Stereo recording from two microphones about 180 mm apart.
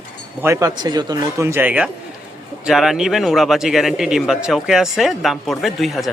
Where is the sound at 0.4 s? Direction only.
15° right (ahead or behind).